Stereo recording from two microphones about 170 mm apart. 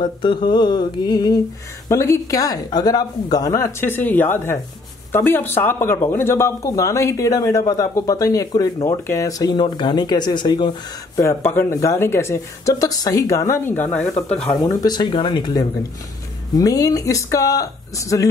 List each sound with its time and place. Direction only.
0.0 s speech: 30° left (ahead or behind)
11.2 s speech: 15° left (ahead or behind)
14.6 s speech: 20° left (ahead or behind)